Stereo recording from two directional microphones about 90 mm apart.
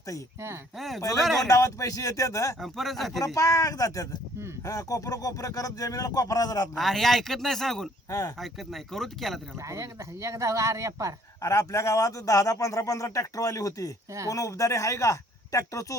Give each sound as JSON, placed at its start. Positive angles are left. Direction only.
{"t": 0.8, "sound": "speech", "side_deg": 0}
{"t": 1.5, "sound": "a man's voice", "side_deg": 40}
{"t": 2.6, "sound": "speech", "side_deg": 0}
{"t": 3.3, "sound": "a man's voice", "side_deg": 40}
{"t": 6.7, "sound": "speech", "side_deg": 0}
{"t": 9.6, "sound": "speech", "side_deg": -35}
{"t": 11.3, "sound": "a man's voice", "side_deg": 35}